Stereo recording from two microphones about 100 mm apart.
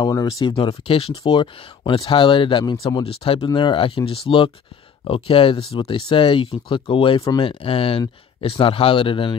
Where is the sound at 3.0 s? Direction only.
70° left (ahead or behind).